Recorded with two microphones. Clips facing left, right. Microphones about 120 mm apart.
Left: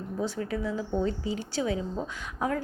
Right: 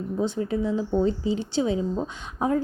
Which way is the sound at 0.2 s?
25° right (ahead or behind).